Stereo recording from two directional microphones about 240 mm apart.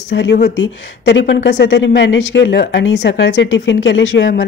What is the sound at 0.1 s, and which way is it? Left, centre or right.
Speech, left.